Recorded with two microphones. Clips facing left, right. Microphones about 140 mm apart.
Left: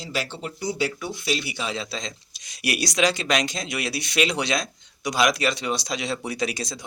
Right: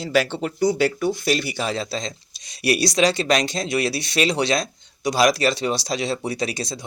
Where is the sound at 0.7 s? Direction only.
45° right (ahead or behind).